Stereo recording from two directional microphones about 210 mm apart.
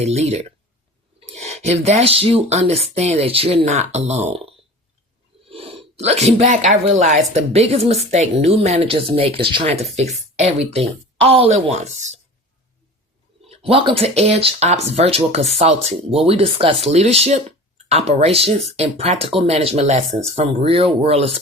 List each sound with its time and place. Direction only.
0.0 s a woman's voice: 30° right (ahead or behind)
13.5 s a woman's voice: 25° right (ahead or behind)